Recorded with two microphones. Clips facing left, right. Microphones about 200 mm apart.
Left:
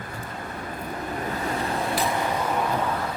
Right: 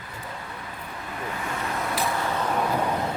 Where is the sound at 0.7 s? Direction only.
40° left (ahead or behind).